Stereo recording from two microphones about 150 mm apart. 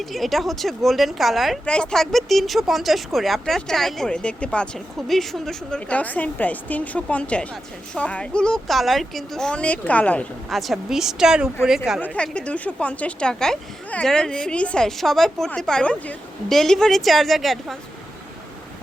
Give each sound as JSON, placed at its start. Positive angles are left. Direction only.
{"t": 0.0, "sound": "speech", "side_deg": 0}
{"t": 12.0, "sound": "speech", "side_deg": 10}